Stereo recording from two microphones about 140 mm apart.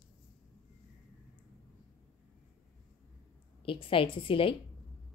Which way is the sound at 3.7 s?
40° left (ahead or behind).